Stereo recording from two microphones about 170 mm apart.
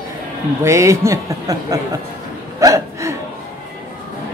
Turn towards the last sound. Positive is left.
turn(degrees=-20)  # may be behind; listen again after turning